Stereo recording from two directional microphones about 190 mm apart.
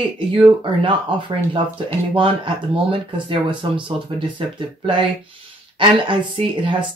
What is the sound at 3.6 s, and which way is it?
Speech, 25° right (ahead or behind).